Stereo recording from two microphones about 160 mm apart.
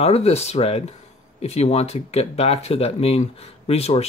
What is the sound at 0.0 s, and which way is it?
Speech, 40° left (ahead or behind).